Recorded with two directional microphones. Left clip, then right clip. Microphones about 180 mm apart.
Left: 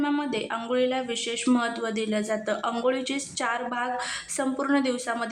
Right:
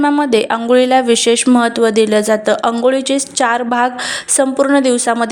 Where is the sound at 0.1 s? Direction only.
50° right (ahead or behind).